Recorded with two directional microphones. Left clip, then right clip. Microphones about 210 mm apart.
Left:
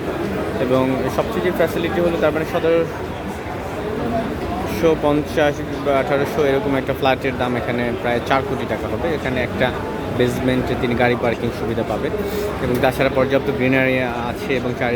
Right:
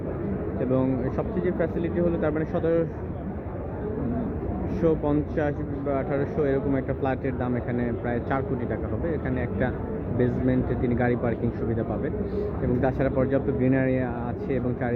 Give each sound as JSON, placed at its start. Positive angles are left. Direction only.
{"t": 0.8, "sound": "a man's voice", "side_deg": 10}
{"t": 4.8, "sound": "speech", "side_deg": 5}
{"t": 12.8, "sound": "speech", "side_deg": 10}